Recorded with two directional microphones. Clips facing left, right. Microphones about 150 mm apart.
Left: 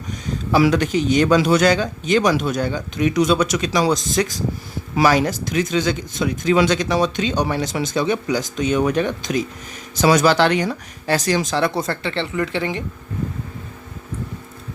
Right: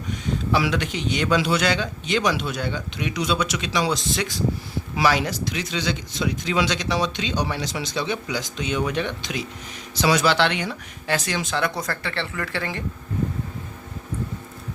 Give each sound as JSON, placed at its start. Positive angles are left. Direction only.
{"t": 0.1, "sound": "speech", "side_deg": 40}